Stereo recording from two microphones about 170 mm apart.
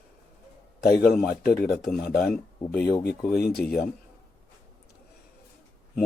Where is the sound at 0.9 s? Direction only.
60° left (ahead or behind).